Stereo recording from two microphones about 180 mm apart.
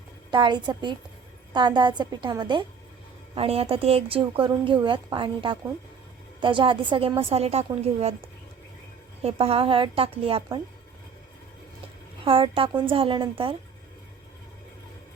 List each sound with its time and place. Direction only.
0.3 s a woman's voice: 25° right (ahead or behind)
9.2 s a woman's voice: 30° right (ahead or behind)
12.2 s a woman's voice: 30° right (ahead or behind)